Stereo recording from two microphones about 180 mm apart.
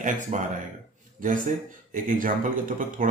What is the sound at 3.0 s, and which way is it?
Speech, 50° right (ahead or behind).